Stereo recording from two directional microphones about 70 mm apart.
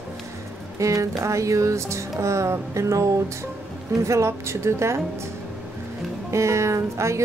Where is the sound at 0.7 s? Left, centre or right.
Right.